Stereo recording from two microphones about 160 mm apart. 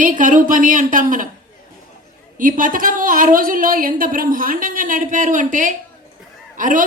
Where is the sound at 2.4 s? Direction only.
60° right (ahead or behind).